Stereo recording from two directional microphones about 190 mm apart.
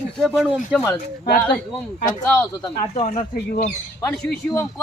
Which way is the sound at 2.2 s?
10° left (ahead or behind).